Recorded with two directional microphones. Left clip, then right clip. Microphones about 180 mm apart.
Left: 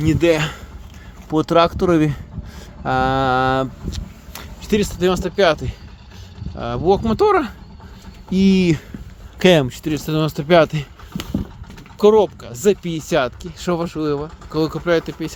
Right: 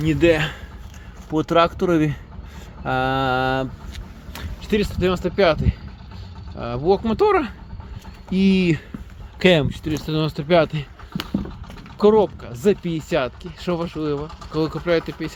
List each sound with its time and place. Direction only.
0.0 s speech: 25° left (ahead or behind)